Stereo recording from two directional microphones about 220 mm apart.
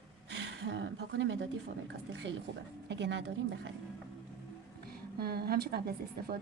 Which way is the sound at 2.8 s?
50° right (ahead or behind).